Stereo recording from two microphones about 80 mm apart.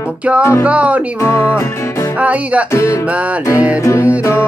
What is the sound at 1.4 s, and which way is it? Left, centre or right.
Music, left.